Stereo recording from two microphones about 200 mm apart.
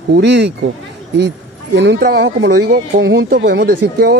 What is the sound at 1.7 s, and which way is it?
Speech, 55° right (ahead or behind).